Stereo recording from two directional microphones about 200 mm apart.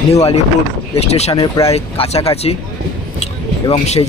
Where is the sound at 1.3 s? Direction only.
20° left (ahead or behind).